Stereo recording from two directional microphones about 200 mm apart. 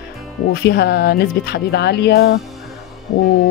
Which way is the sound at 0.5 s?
55° left (ahead or behind).